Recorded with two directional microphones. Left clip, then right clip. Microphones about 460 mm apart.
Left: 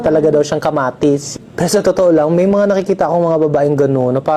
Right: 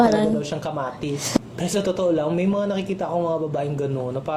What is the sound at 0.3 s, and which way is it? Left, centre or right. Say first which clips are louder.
A woman's voice: left 13 dB; left.